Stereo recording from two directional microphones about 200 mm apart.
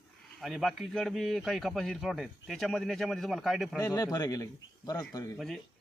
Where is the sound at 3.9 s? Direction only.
15° left (ahead or behind).